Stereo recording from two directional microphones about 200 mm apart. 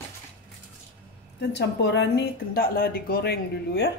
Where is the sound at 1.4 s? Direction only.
60° left (ahead or behind).